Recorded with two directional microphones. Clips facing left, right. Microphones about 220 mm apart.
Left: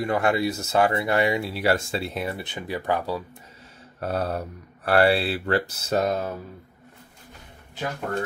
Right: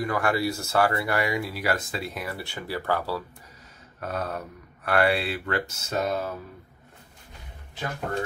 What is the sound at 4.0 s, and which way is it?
Speech, 30° left (ahead or behind).